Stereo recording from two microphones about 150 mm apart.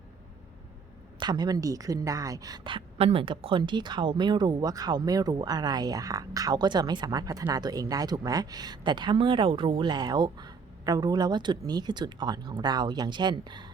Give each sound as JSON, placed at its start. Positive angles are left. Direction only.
{"t": 1.2, "sound": "a woman's voice", "side_deg": -25}